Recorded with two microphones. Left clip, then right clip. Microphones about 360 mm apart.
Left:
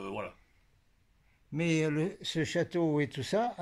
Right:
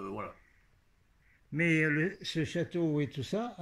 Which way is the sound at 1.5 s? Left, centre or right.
Centre.